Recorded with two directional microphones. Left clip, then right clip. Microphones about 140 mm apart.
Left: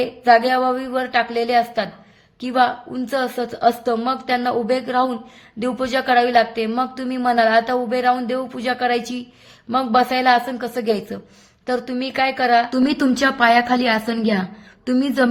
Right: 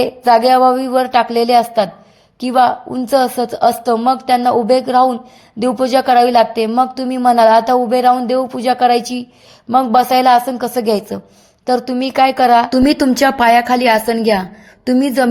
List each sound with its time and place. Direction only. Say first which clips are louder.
0.0 s a woman's voice: right 4 dB; 45° right (ahead or behind)